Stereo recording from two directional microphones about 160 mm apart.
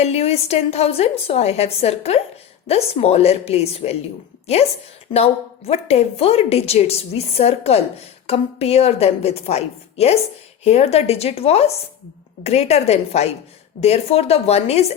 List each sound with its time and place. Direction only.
0.0 s a woman's voice: 40° left (ahead or behind)
5.1 s a woman's voice: 40° left (ahead or behind)